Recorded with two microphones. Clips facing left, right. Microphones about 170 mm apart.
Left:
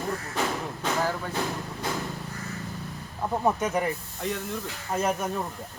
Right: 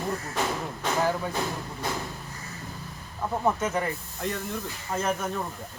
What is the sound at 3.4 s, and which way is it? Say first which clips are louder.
Speech: left 1 dB; 15° left (ahead or behind).